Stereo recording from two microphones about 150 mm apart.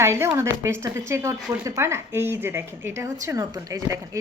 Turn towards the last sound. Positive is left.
turn(degrees=-20)  # may be behind; listen again after turning